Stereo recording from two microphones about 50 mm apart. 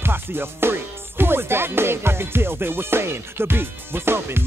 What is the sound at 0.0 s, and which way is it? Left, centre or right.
Music, right.